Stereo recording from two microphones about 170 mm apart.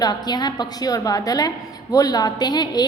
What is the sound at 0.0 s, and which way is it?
A woman's voice, 25° left (ahead or behind).